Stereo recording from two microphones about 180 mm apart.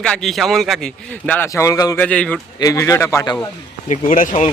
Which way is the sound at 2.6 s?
20° left (ahead or behind).